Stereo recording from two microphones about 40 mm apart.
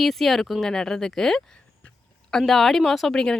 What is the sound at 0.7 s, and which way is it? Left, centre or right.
Speech, centre.